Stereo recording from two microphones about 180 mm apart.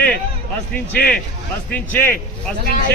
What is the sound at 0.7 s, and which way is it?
A man's voice, 10° left (ahead or behind).